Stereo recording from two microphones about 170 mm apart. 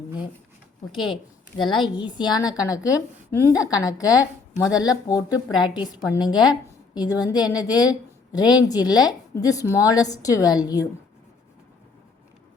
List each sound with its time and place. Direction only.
0.9 s a woman's voice: centre (ahead or behind)
1.5 s a woman's voice: 25° left (ahead or behind)